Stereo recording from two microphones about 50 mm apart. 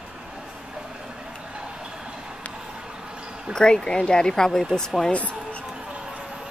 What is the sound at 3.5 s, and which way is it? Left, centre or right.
Speech, centre.